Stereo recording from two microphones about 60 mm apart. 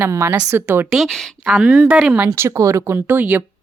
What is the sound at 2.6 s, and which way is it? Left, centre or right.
Speech, right.